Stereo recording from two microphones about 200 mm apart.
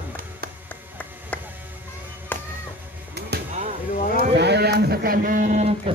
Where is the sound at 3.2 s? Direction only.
55° right (ahead or behind).